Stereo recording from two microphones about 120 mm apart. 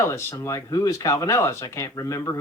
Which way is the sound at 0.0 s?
20° left (ahead or behind).